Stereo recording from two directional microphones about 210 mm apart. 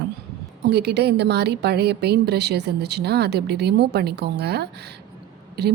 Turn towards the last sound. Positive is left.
turn(degrees=-50)  # may be behind; listen again after turning